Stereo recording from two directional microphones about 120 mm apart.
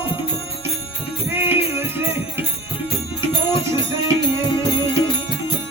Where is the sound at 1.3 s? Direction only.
15° right (ahead or behind).